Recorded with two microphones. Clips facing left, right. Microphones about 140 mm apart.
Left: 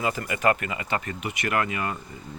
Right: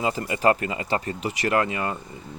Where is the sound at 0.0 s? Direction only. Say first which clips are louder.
Right 2 dB; 25° right (ahead or behind).